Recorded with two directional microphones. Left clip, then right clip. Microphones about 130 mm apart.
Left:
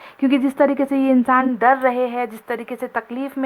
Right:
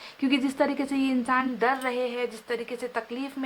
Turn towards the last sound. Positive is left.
turn(degrees=35)  # may be behind; listen again after turning